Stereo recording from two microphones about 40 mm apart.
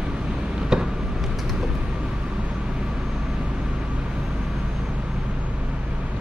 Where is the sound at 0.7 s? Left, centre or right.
Centre.